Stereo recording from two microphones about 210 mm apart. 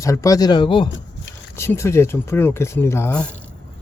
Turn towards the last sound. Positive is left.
turn(degrees=10)  # may be behind; listen again after turning